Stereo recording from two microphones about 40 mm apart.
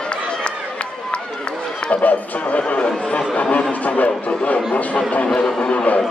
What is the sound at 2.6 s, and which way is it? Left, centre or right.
Speech, left.